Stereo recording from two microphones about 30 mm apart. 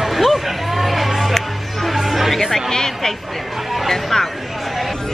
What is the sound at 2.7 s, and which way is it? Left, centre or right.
Speech, centre.